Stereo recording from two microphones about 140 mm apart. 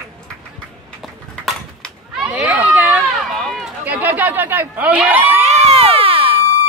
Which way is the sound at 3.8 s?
10° right (ahead or behind).